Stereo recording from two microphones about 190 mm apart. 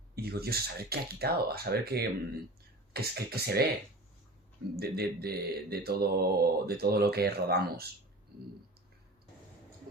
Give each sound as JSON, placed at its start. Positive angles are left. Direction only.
{"t": 0.2, "sound": "mantra", "side_deg": -55}
{"t": 4.8, "sound": "mantra", "side_deg": -55}